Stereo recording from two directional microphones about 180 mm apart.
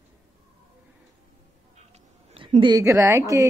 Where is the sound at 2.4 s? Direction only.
30° right (ahead or behind).